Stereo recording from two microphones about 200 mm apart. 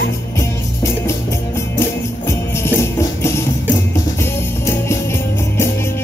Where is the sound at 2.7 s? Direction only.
15° left (ahead or behind).